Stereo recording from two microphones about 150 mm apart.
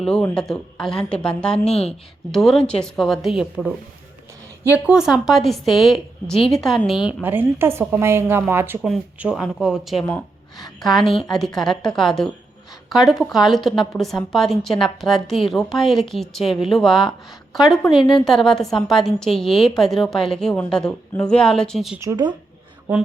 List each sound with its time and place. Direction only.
0.0 s a woman's voice: 5° left (ahead or behind)
4.7 s a woman's voice: 5° right (ahead or behind)
7.1 s a woman's voice: 15° right (ahead or behind)
22.0 s speech: 30° right (ahead or behind)